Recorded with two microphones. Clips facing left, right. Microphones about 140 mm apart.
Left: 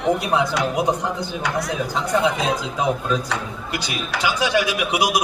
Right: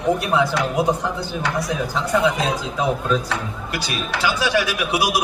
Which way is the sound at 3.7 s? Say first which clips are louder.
Right 1 dB; 15° left (ahead or behind).